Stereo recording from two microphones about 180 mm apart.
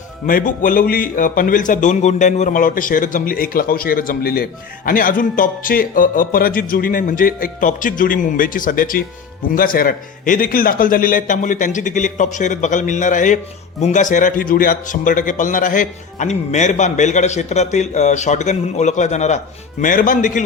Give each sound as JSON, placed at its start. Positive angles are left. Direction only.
{"t": 0.3, "sound": "a man's voice", "side_deg": 50}